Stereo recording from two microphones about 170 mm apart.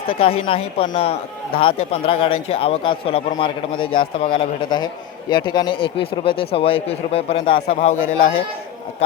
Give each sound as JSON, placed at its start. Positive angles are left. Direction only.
{"t": 0.1, "sound": "a man's voice", "side_deg": 30}